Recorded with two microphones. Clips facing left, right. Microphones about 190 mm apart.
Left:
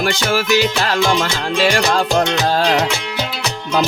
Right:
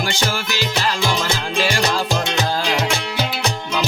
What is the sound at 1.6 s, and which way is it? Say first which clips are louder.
Music: left 5 dB; 70° left (ahead or behind).